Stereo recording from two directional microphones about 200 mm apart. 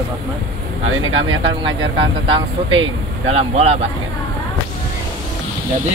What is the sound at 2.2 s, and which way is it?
Speech, 25° right (ahead or behind).